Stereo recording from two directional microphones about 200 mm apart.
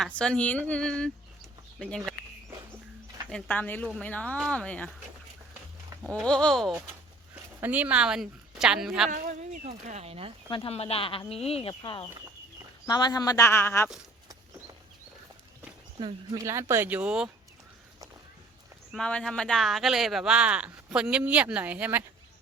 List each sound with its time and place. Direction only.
0.0 s speech: 5° left (ahead or behind)
3.2 s speech: 5° left (ahead or behind)
6.1 s speech: 5° left (ahead or behind)
9.0 s speech: 40° right (ahead or behind)
10.5 s speech: 30° left (ahead or behind); by 13.9 s 10° left (ahead or behind)
16.0 s speech: 20° right (ahead or behind); by 17.2 s 5° right (ahead or behind)
18.9 s speech: 5° left (ahead or behind)